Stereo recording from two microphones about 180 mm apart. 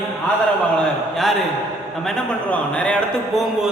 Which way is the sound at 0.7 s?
5° left (ahead or behind).